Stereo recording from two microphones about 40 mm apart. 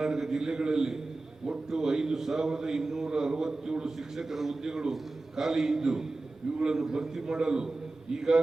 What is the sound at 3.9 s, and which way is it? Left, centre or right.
A man's voice, centre.